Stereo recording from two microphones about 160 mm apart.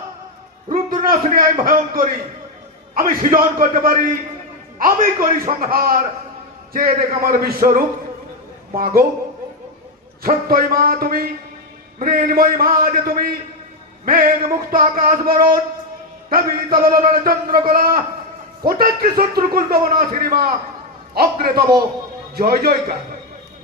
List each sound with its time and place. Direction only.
0.7 s a man's voice: 60° right (ahead or behind)
10.2 s speech: 65° right (ahead or behind)
16.7 s a man's voice: 65° right (ahead or behind)